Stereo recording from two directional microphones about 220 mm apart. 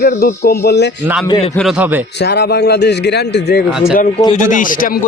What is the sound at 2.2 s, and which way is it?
A man's voice, 50° left (ahead or behind).